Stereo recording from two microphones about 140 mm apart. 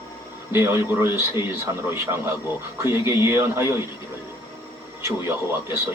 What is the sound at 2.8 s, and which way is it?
Speech, 20° right (ahead or behind).